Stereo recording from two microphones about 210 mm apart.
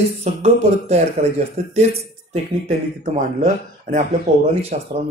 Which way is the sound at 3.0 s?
35° right (ahead or behind).